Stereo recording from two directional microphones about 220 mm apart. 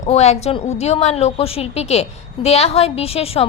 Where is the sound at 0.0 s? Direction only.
30° left (ahead or behind).